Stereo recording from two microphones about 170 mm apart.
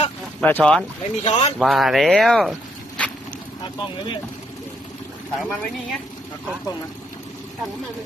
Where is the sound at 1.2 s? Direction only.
35° left (ahead or behind).